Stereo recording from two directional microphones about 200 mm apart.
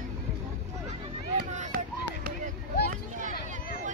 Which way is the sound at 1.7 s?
45° right (ahead or behind).